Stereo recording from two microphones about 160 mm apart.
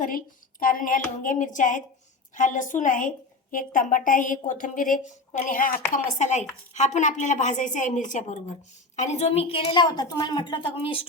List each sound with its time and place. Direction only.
0.0 s a woman's voice: 60° left (ahead or behind); by 11.0 s 35° left (ahead or behind)